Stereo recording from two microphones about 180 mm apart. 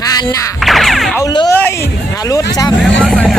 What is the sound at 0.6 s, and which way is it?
Music, centre (ahead or behind).